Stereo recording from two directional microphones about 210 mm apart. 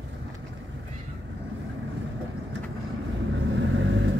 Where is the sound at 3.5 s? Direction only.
60° right (ahead or behind).